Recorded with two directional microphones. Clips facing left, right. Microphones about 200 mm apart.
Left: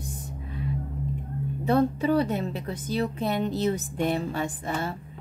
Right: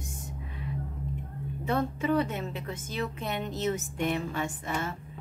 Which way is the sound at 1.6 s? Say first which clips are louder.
Left 6 dB; 35° left (ahead or behind).